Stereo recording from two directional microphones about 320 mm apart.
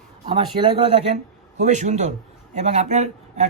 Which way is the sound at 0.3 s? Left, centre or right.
Centre.